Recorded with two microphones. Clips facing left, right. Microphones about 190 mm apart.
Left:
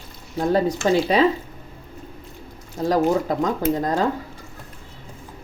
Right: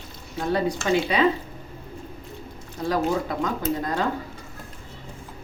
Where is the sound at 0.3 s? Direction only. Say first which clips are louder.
Left 4 dB; 35° left (ahead or behind).